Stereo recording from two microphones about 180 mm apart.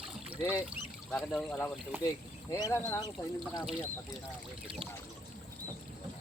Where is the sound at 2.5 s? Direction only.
20° left (ahead or behind).